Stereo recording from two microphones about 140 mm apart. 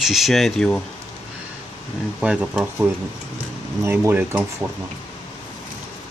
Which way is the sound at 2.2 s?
5° right (ahead or behind).